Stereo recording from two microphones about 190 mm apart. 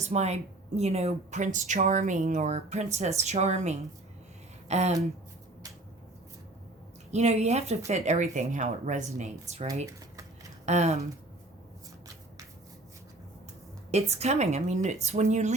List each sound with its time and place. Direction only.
0.0 s speech: 35° right (ahead or behind)
7.1 s speech: 35° right (ahead or behind)
10.7 s speech: 35° right (ahead or behind)
13.9 s speech: 35° right (ahead or behind)